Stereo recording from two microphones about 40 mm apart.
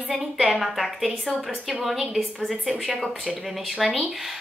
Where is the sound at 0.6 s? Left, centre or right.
Centre.